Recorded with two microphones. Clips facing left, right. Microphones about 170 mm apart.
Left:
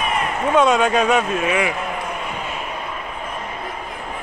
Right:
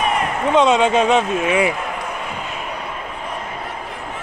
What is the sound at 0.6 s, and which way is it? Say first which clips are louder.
Speech: right 2 dB; 20° right (ahead or behind).